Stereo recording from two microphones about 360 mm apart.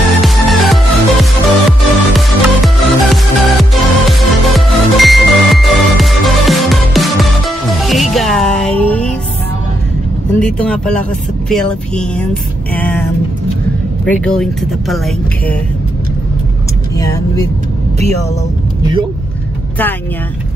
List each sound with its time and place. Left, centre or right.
0.2 s music: centre
10.4 s speech: centre
14.0 s speech: centre
16.9 s speech: centre
19.8 s speech: centre